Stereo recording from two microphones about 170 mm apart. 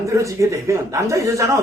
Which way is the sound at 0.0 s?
20° right (ahead or behind).